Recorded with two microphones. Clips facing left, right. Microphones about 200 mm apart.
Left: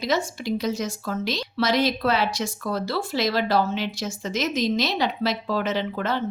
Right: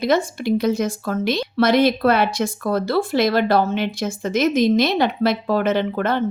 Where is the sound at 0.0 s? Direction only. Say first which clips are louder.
Right 6 dB; 55° right (ahead or behind).